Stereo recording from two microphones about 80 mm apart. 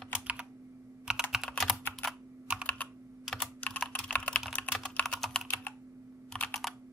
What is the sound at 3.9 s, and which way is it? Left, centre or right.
Typing, centre.